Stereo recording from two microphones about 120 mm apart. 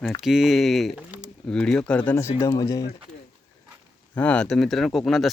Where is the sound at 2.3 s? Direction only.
30° left (ahead or behind).